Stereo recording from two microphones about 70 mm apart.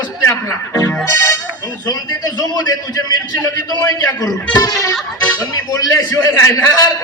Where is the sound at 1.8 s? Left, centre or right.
Left.